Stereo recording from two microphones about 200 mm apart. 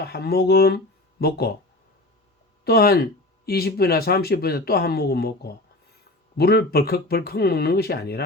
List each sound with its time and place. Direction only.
0.0 s speech: 50° left (ahead or behind)
2.6 s speech: 50° left (ahead or behind)